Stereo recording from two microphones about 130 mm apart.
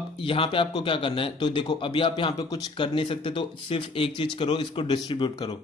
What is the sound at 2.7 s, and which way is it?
Speech, 40° left (ahead or behind).